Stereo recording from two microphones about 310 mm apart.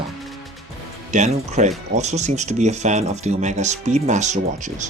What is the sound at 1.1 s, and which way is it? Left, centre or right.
Speech, right.